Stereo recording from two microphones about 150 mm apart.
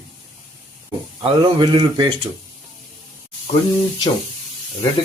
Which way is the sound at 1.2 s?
35° right (ahead or behind).